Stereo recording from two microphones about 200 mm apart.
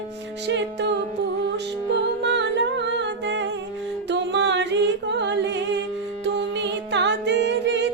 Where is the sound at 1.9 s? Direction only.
60° right (ahead or behind).